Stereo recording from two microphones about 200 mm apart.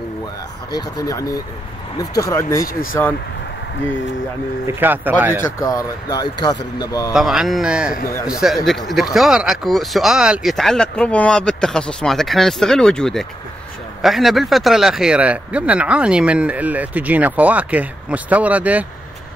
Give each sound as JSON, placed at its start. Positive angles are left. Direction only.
{"t": 0.7, "sound": "speech", "side_deg": 20}
{"t": 2.6, "sound": "speech", "side_deg": 45}
{"t": 4.6, "sound": "speech", "side_deg": -10}
{"t": 5.6, "sound": "speech", "side_deg": 15}
{"t": 7.2, "sound": "speech", "side_deg": 0}